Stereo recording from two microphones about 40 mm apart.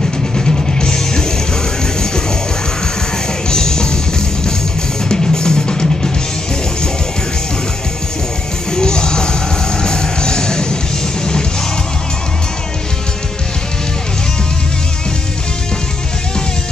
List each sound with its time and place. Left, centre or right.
0.5 s music: centre
3.4 s music: centre
5.1 s music: centre
8.7 s music: centre